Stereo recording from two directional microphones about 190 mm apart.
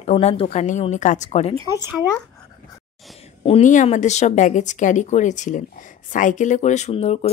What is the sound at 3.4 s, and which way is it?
Speech, 35° left (ahead or behind).